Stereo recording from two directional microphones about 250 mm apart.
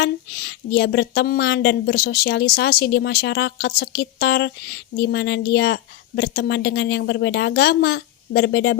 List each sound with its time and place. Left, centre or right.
0.0 s a woman's voice: left